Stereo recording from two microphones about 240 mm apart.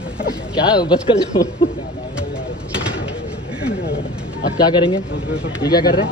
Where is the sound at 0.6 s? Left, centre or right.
Centre.